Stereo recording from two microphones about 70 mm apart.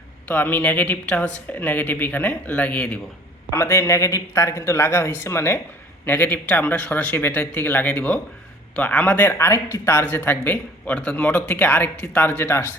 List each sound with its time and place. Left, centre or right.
0.3 s a man's voice: left
3.5 s speech: left
6.1 s a man's voice: left